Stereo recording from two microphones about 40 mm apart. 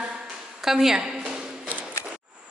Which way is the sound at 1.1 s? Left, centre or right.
Right.